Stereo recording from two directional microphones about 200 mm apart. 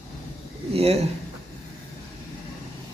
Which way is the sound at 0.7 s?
30° right (ahead or behind).